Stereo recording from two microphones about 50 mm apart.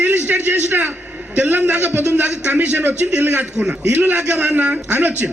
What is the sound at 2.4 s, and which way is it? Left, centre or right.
Speech, right.